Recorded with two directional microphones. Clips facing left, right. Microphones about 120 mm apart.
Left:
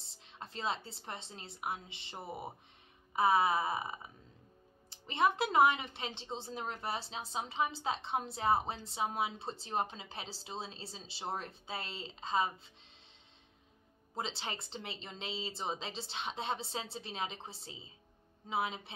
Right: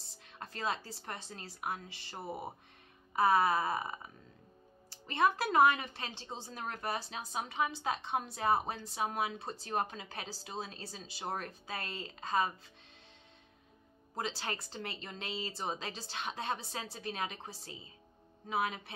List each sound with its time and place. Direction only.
0.1 s speech: 25° left (ahead or behind)
2.1 s speech: 25° right (ahead or behind)
3.1 s a woman's voice: 20° left (ahead or behind)
14.1 s a woman's voice: 25° left (ahead or behind)